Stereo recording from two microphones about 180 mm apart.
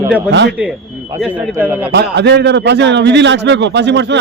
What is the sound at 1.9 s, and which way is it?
A man's voice, 70° right (ahead or behind).